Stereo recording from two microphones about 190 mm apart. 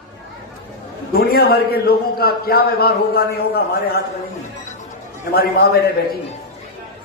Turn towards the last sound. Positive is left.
turn(degrees=55)  # may be behind; listen again after turning